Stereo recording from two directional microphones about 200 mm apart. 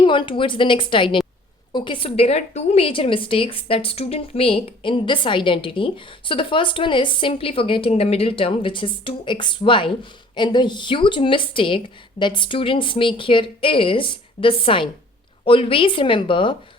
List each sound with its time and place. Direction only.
0.0 s a woman's voice: 25° left (ahead or behind)